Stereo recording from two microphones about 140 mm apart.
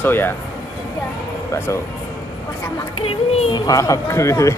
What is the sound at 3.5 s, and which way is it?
Speech, 25° left (ahead or behind).